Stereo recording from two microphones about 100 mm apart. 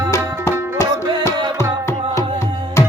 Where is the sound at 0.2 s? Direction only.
30° right (ahead or behind).